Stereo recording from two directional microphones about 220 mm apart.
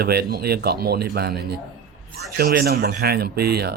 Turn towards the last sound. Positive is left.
turn(degrees=-45)  # may be behind; listen again after turning